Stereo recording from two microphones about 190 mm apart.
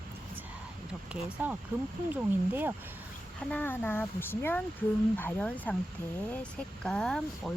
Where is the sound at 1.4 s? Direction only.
10° right (ahead or behind).